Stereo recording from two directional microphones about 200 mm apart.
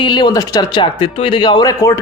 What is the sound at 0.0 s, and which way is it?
A man's voice, 20° left (ahead or behind).